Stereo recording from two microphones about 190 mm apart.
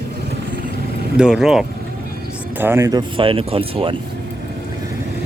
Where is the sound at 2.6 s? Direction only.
15° right (ahead or behind).